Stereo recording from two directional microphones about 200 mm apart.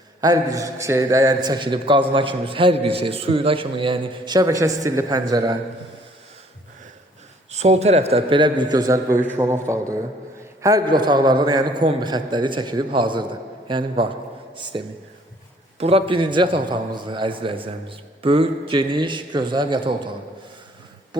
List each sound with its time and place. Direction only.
0.2 s a man's voice: 15° right (ahead or behind)
7.5 s a man's voice: 35° right (ahead or behind)